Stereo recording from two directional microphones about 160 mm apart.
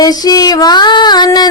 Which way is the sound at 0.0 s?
25° left (ahead or behind).